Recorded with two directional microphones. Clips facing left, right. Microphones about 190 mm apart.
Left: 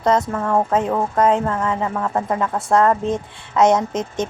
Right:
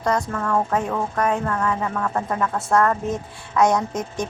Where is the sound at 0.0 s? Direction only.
25° left (ahead or behind).